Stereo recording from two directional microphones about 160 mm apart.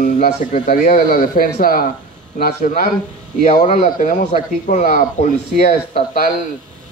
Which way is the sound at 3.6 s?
55° left (ahead or behind).